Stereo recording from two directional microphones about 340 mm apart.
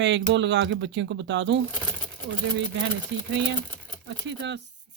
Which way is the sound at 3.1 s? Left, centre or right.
Right.